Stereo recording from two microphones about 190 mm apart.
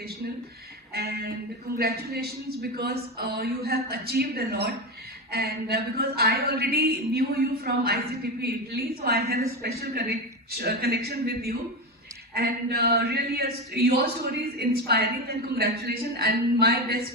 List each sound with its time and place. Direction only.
0.9 s music: 55° right (ahead or behind)
1.7 s speech: 55° right (ahead or behind)